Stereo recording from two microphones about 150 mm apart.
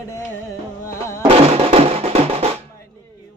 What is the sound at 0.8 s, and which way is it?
Music, 20° left (ahead or behind).